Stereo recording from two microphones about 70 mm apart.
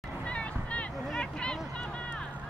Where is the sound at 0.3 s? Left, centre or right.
Centre.